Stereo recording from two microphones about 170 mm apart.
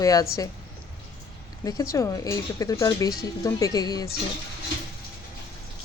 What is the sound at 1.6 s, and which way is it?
Speech, 20° left (ahead or behind).